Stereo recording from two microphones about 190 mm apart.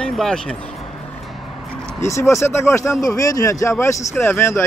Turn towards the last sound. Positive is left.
turn(degrees=15)  # may be behind; listen again after turning